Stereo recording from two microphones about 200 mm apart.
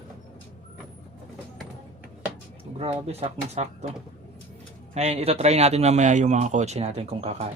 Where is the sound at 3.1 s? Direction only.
30° right (ahead or behind).